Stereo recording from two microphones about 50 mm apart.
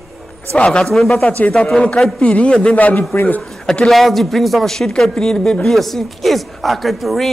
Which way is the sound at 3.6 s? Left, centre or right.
Centre.